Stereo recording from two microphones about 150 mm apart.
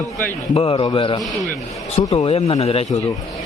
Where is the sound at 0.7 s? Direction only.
30° left (ahead or behind).